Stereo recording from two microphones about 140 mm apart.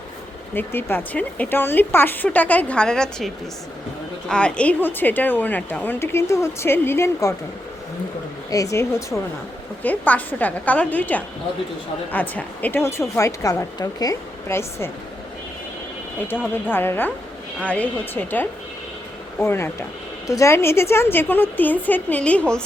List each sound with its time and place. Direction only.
0.5 s a woman's voice: 15° left (ahead or behind)
4.3 s a woman's voice: 5° left (ahead or behind)
8.4 s a woman's voice: 25° left (ahead or behind)
16.6 s a woman's voice: 15° left (ahead or behind)